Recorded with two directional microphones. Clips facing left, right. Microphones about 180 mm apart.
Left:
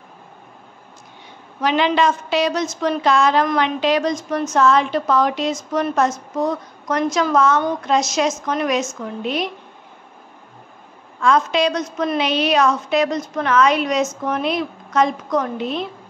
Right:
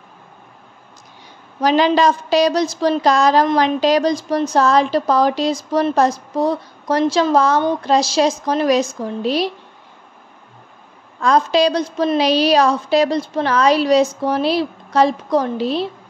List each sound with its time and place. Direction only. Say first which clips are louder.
1.6 s a woman's voice: right 3 dB; 40° right (ahead or behind)
11.1 s a woman's voice: right 2 dB; 35° right (ahead or behind)